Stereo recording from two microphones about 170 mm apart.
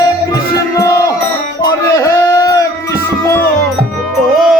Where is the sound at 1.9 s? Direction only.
20° left (ahead or behind).